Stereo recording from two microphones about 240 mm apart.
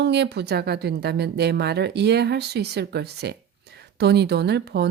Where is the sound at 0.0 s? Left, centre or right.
Right.